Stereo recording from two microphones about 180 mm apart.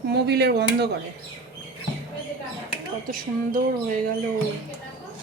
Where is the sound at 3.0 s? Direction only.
50° right (ahead or behind).